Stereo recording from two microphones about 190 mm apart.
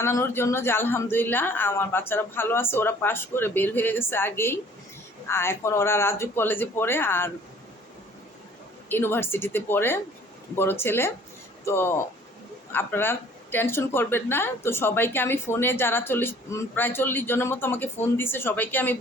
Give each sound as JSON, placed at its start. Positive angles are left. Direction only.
{"t": 0.0, "sound": "a woman's voice", "side_deg": 15}
{"t": 8.9, "sound": "a woman's voice", "side_deg": 10}